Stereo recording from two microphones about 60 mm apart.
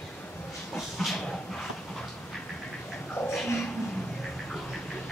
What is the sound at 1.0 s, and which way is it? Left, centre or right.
Dog, centre.